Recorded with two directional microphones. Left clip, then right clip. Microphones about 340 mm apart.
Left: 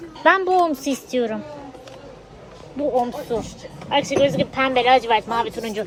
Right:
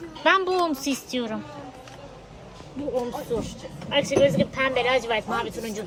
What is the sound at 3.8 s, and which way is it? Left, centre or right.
A woman's voice, left.